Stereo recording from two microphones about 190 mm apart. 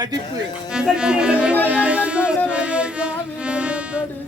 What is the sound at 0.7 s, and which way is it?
Speech, 5° right (ahead or behind).